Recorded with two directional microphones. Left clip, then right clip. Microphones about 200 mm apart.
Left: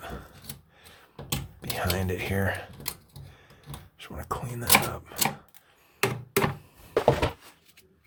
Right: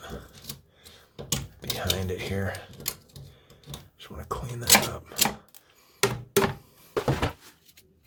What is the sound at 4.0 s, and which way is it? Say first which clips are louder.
Speech: left 1 dB; 10° left (ahead or behind).